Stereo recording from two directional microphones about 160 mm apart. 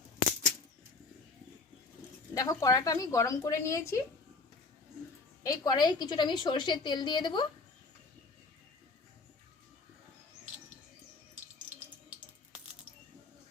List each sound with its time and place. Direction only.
2.3 s a woman's voice: 20° left (ahead or behind)
5.4 s a woman's voice: 25° left (ahead or behind)